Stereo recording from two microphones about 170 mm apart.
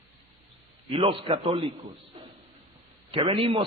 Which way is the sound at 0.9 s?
30° right (ahead or behind).